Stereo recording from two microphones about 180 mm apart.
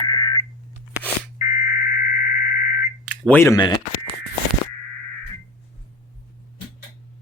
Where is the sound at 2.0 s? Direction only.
45° left (ahead or behind).